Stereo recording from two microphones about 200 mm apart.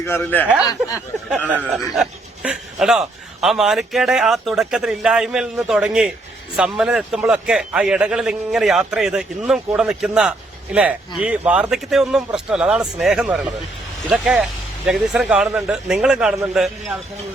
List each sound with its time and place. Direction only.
0.0 s speech: 10° left (ahead or behind)
1.5 s a man's voice: 5° right (ahead or behind)